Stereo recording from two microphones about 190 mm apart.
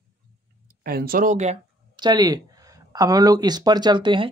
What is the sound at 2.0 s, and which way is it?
Speech, 20° right (ahead or behind).